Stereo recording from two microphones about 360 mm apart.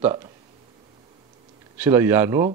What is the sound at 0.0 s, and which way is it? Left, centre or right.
Speech, centre.